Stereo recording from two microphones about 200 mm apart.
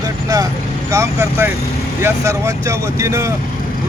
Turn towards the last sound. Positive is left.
turn(degrees=-15)  # may be behind; listen again after turning